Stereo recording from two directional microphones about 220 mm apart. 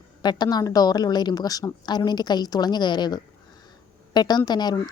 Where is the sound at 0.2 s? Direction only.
20° left (ahead or behind).